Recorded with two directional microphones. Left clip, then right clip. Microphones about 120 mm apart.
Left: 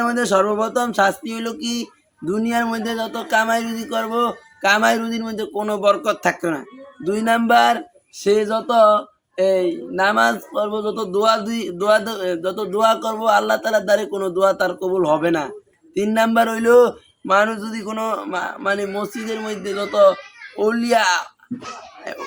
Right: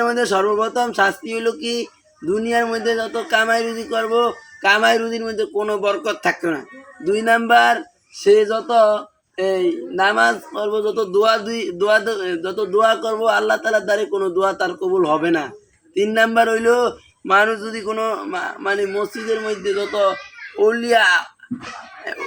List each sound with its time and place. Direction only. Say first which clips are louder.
0.1 s a man's voice: even; 30° left (ahead or behind)
17.4 s a man's voice: right 2 dB; 15° left (ahead or behind); by 20.1 s 35° left (ahead or behind)